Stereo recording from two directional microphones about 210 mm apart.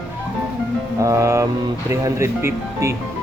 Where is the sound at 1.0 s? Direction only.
15° right (ahead or behind).